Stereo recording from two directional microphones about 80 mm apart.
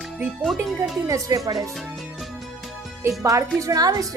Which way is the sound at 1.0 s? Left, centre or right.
Right.